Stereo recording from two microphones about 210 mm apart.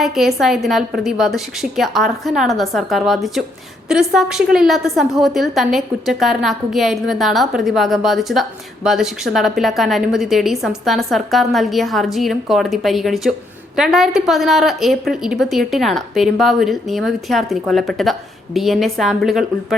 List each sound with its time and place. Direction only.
0.0 s a woman's voice: centre (ahead or behind)